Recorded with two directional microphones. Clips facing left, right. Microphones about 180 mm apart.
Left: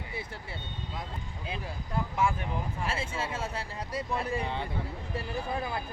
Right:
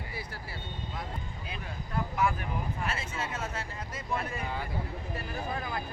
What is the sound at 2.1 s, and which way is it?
Speech, 25° left (ahead or behind).